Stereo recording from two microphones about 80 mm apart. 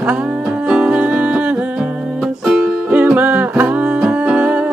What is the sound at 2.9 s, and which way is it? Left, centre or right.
Music, right.